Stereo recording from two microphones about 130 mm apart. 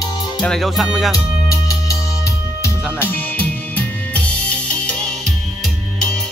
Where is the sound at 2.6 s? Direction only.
15° left (ahead or behind).